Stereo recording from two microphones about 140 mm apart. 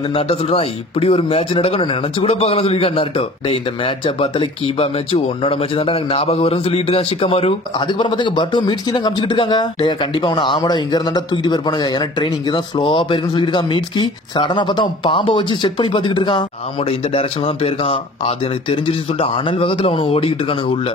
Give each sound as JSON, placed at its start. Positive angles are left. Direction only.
{"t": 0.1, "sound": "speech", "side_deg": 45}